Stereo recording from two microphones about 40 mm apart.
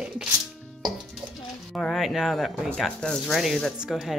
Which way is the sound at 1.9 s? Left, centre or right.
Centre.